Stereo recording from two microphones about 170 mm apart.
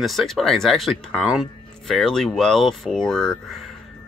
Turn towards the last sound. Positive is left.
turn(degrees=0)  # may be behind; listen again after turning